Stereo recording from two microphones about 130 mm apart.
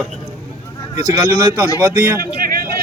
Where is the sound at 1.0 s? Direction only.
25° right (ahead or behind).